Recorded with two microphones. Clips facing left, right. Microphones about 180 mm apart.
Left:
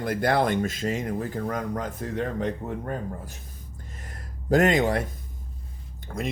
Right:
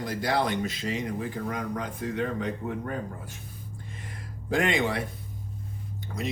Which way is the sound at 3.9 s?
45° left (ahead or behind).